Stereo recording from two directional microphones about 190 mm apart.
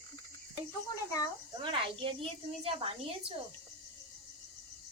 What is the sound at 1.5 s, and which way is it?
A woman's voice, 25° right (ahead or behind).